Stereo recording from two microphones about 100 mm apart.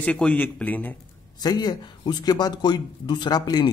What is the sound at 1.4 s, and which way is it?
Speech, 45° left (ahead or behind).